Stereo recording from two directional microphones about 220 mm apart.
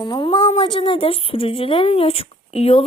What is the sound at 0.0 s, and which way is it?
Speech, 20° left (ahead or behind).